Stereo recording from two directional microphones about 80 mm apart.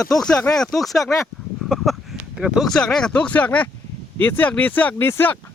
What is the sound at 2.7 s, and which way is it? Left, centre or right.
Speech, centre.